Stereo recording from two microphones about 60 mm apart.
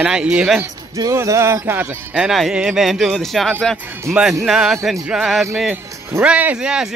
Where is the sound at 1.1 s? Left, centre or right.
Right.